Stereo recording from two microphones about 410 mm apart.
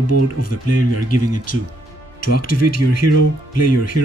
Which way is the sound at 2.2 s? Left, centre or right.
Left.